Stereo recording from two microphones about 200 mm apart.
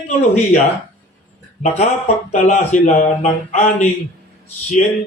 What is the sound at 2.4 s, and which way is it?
Speech, 35° left (ahead or behind).